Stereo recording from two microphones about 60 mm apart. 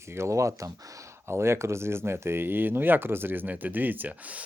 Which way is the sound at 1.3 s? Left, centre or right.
Right.